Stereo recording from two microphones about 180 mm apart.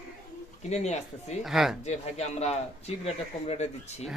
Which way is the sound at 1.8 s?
35° left (ahead or behind).